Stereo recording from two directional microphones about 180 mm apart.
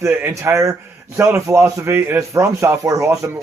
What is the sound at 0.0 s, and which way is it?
A man's voice, 15° right (ahead or behind).